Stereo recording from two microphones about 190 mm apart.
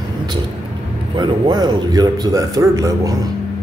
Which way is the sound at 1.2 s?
25° right (ahead or behind).